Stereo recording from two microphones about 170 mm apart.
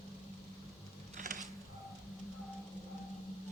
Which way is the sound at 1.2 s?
50° right (ahead or behind).